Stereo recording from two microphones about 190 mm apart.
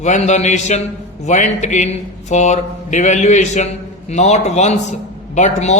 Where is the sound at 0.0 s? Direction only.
40° left (ahead or behind).